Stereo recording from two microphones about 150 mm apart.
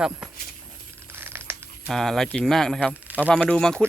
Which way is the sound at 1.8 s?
Centre (ahead or behind).